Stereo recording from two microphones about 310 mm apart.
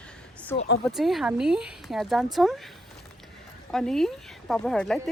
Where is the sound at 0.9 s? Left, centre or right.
Centre.